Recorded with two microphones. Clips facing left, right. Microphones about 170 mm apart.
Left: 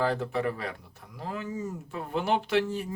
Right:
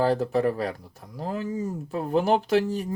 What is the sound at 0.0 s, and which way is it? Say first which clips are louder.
Speech: right 5 dB; 35° right (ahead or behind).